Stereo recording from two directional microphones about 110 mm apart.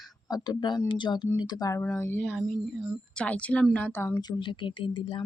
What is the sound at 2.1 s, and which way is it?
Speech, 5° left (ahead or behind).